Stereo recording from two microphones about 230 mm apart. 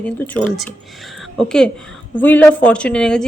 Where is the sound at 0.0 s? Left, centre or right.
Centre.